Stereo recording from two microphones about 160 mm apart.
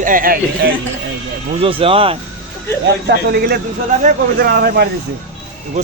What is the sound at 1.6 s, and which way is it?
Speech, 35° right (ahead or behind).